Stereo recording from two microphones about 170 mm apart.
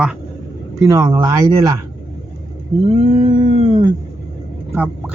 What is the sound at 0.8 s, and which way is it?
Speech, 20° right (ahead or behind).